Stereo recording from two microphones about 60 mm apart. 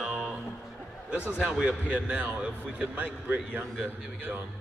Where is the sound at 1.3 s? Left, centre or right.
Centre.